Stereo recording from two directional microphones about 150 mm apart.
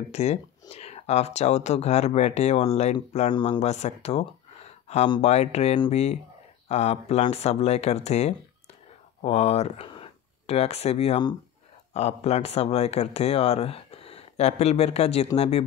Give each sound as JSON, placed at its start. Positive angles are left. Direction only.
{"t": 0.1, "sound": "speech", "side_deg": 45}
{"t": 4.8, "sound": "a sound", "side_deg": 45}
{"t": 5.2, "sound": "speech", "side_deg": 45}